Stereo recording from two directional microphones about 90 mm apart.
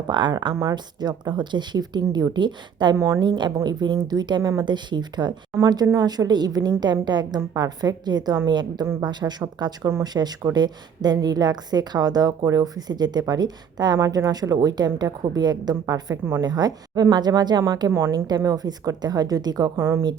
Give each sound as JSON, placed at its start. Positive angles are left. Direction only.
{"t": 0.1, "sound": "speech", "side_deg": -55}
{"t": 0.5, "sound": "a woman's voice", "side_deg": -35}
{"t": 0.9, "sound": "a woman's voice", "side_deg": -50}
{"t": 2.9, "sound": "a woman's voice", "side_deg": -30}
{"t": 3.2, "sound": "a woman's voice", "side_deg": -55}
{"t": 19.7, "sound": "a woman's voice", "side_deg": -30}